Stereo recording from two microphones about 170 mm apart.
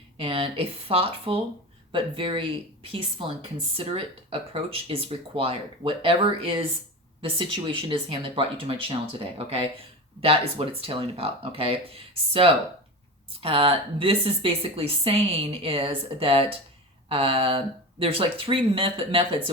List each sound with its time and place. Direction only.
0.2 s a woman's voice: 35° right (ahead or behind)
3.8 s a woman's voice: 35° right (ahead or behind)